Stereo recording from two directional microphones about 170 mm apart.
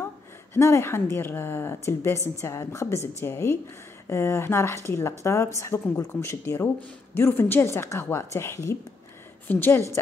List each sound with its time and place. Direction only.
0.6 s a woman's voice: 15° left (ahead or behind)